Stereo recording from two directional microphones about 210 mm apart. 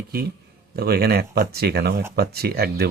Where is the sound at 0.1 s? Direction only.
50° right (ahead or behind).